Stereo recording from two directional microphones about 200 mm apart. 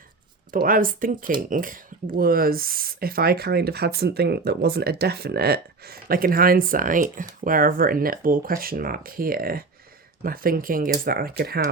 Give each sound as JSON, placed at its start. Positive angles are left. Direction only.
{"t": 0.5, "sound": "speech", "side_deg": -45}